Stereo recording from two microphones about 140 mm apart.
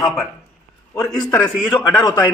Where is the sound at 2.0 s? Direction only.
30° left (ahead or behind).